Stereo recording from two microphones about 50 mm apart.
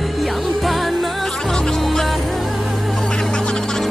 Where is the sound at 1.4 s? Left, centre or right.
Centre.